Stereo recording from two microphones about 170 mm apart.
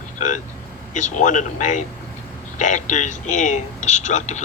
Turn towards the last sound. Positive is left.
turn(degrees=45)  # may be behind; listen again after turning